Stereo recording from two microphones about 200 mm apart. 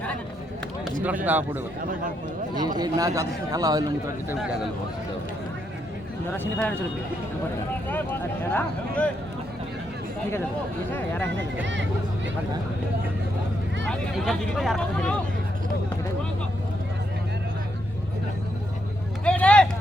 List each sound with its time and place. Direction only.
1.0 s speech: 10° right (ahead or behind)
2.6 s a man's voice: 20° right (ahead or behind)
4.4 s speech: centre (ahead or behind)
6.3 s speech: 10° left (ahead or behind)
8.4 s speech: 10° left (ahead or behind)
11.6 s speech: 65° right (ahead or behind)
13.8 s speech: centre (ahead or behind)
19.2 s vehicle: 5° left (ahead or behind)